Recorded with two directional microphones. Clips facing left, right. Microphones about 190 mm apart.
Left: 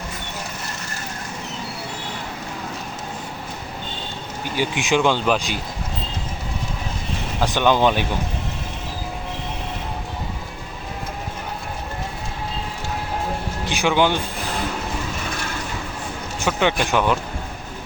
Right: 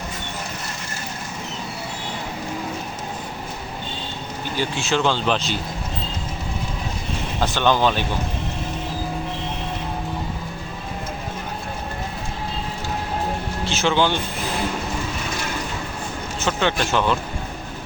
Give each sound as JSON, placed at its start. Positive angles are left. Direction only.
{"t": 4.5, "sound": "speech", "side_deg": 15}
{"t": 7.3, "sound": "speech", "side_deg": 10}
{"t": 13.7, "sound": "speech", "side_deg": 15}
{"t": 16.4, "sound": "speech", "side_deg": 15}